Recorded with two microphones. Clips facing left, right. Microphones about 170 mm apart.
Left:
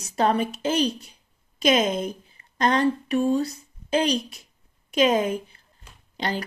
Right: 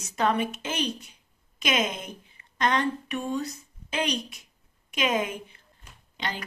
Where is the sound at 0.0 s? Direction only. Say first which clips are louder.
Left 3 dB; 35° left (ahead or behind).